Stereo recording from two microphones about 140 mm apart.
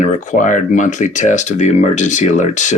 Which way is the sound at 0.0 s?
65° left (ahead or behind).